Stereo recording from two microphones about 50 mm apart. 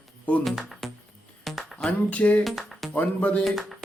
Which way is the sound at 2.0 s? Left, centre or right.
Left.